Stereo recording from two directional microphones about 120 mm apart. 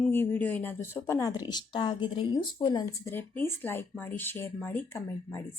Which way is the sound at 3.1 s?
20° left (ahead or behind).